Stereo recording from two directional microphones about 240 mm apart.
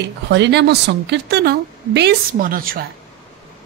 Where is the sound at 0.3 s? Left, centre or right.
Right.